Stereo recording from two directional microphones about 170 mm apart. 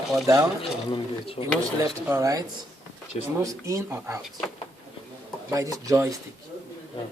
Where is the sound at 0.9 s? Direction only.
30° left (ahead or behind).